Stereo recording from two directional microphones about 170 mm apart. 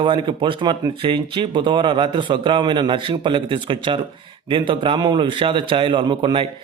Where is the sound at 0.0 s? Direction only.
30° right (ahead or behind).